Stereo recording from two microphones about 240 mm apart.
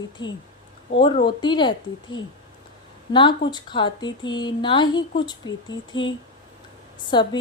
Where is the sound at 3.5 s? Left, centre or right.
Centre.